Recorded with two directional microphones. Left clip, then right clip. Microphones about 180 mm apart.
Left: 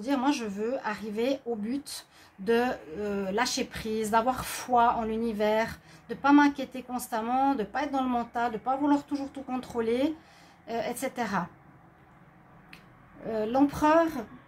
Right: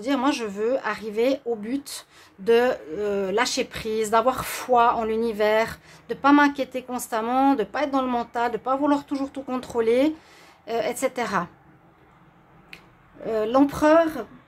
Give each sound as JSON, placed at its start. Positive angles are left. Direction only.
{"t": 0.0, "sound": "a woman's voice", "side_deg": -30}
{"t": 12.7, "sound": "speech", "side_deg": -35}